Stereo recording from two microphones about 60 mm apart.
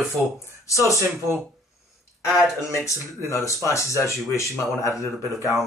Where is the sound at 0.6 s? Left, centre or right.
Left.